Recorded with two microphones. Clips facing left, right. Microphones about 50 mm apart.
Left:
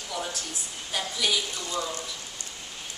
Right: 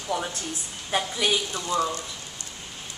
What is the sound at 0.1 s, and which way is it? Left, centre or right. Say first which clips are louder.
A woman's voice: right 5 dB; right.